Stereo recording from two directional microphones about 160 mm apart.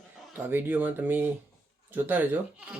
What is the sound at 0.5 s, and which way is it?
Speech, 10° right (ahead or behind).